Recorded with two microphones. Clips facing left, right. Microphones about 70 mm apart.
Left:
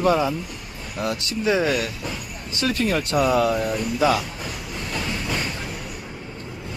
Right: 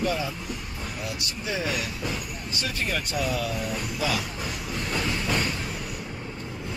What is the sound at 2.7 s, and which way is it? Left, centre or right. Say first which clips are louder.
Speech: left 8 dB; left.